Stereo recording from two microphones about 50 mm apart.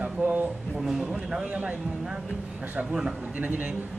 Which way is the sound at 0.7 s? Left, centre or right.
Centre.